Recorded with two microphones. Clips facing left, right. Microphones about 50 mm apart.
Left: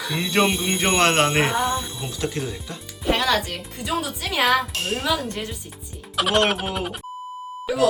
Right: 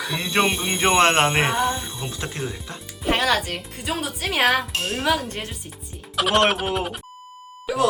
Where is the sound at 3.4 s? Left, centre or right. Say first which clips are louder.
Right 1 dB; centre.